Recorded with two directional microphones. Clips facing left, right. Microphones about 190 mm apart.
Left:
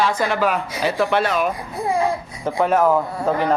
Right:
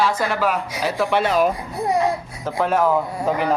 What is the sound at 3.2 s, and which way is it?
Speech, 10° right (ahead or behind).